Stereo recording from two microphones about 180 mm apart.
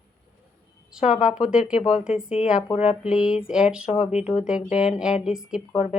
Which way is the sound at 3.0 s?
5° right (ahead or behind).